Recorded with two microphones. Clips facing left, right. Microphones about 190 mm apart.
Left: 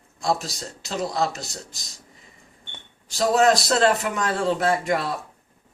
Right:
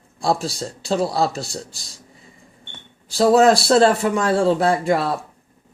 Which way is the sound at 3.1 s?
35° right (ahead or behind).